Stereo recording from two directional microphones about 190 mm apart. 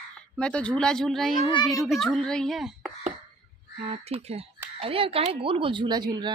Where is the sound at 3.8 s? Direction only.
35° right (ahead or behind).